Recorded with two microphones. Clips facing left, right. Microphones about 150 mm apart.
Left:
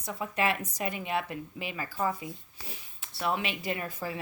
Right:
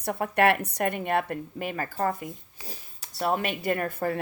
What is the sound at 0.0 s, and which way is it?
A woman's voice, 65° right (ahead or behind).